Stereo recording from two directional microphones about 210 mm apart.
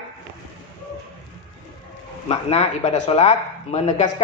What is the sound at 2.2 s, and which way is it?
Speech, 30° left (ahead or behind).